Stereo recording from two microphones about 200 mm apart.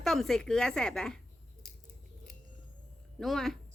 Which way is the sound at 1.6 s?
Centre (ahead or behind).